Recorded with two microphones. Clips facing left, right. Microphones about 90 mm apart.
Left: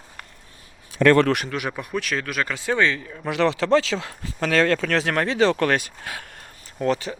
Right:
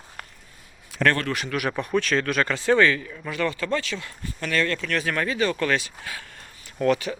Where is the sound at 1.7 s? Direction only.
10° left (ahead or behind); by 3.2 s 25° left (ahead or behind).